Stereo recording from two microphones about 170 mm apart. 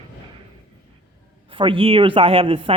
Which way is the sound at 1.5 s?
30° right (ahead or behind).